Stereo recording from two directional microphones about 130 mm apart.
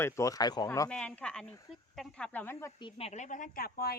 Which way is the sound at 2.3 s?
15° left (ahead or behind).